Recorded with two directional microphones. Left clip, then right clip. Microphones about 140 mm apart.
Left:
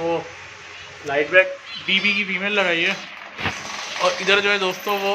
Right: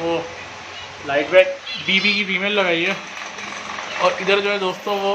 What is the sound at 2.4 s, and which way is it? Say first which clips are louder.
Speech: right 1 dB; centre (ahead or behind).